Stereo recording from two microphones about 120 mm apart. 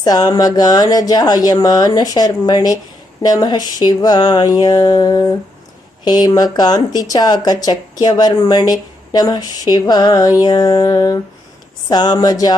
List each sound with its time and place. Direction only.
0.0 s speech: 35° left (ahead or behind)